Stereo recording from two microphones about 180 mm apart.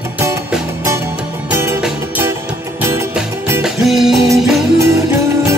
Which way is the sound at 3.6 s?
Centre (ahead or behind).